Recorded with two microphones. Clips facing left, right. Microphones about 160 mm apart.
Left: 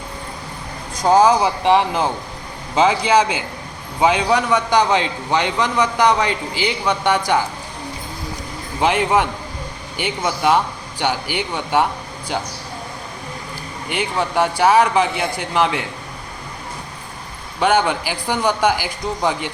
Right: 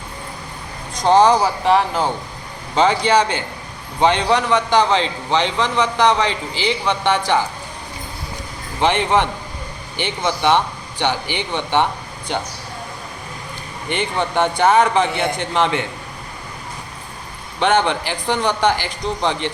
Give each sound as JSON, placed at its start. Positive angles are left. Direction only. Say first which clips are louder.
{"t": 1.0, "sound": "a man's voice", "louder": "even", "side_deg": 5}
{"t": 1.6, "sound": "speech", "louder": "left 2 dB", "side_deg": 20}
{"t": 2.7, "sound": "a man's voice", "louder": "even", "side_deg": 5}
{"t": 8.8, "sound": "a man's voice", "louder": "even", "side_deg": 5}
{"t": 13.9, "sound": "a man's voice", "louder": "even", "side_deg": 0}
{"t": 17.6, "sound": "a man's voice", "louder": "even", "side_deg": 5}